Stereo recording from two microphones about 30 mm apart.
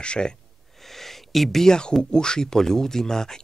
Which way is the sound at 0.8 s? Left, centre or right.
Centre.